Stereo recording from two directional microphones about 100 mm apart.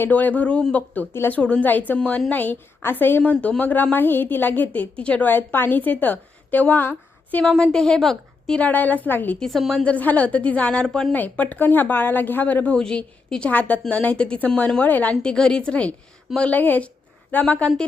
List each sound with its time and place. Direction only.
0.0 s a woman's voice: 15° left (ahead or behind)
1.4 s a woman's voice: 10° left (ahead or behind)
7.4 s a woman's voice: 5° left (ahead or behind)
9.4 s a woman's voice: centre (ahead or behind)
9.8 s a woman's voice: 15° left (ahead or behind)
11.1 s a woman's voice: 15° left (ahead or behind)